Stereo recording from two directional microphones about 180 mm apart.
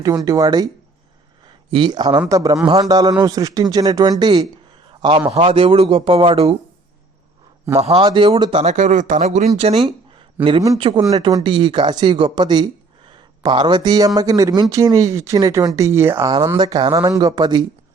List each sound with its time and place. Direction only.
0.0 s speech: 20° right (ahead or behind)
1.7 s speech: 25° right (ahead or behind)
4.9 s a sound: 25° right (ahead or behind)
5.3 s speech: 30° right (ahead or behind)
7.8 s speech: 35° right (ahead or behind)
10.4 s speech: 20° right (ahead or behind)